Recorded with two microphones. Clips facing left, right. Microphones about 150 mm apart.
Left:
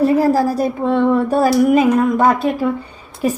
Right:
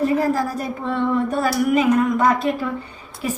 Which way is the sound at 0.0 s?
35° left (ahead or behind).